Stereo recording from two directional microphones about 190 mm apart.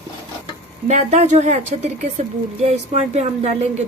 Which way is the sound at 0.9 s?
40° right (ahead or behind).